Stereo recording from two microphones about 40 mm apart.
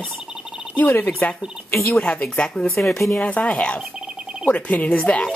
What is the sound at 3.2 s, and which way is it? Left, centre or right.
Speech, left.